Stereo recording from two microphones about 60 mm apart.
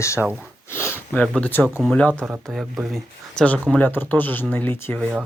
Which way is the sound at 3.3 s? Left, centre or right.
Left.